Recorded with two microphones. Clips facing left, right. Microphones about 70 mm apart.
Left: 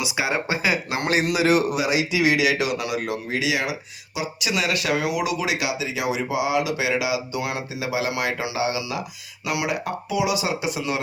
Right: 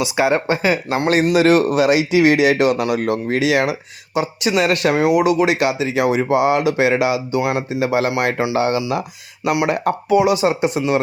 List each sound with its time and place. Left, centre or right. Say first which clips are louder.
0.0 s speech: right 8 dB; right